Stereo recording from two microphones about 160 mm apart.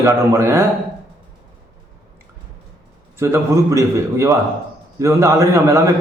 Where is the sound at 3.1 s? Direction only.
15° right (ahead or behind).